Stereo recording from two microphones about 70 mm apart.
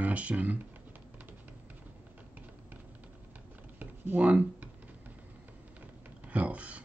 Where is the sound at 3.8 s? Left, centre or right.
Right.